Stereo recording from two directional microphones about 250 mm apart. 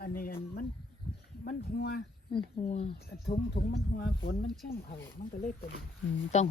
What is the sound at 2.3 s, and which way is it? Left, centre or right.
Speech, left.